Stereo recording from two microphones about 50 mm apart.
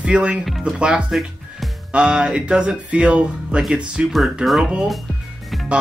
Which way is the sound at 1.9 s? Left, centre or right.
Centre.